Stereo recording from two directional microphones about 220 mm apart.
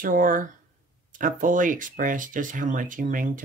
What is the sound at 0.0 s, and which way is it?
Speech, 40° right (ahead or behind).